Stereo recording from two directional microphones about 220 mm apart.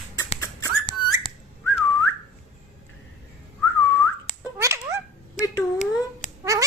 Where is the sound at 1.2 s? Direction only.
15° left (ahead or behind).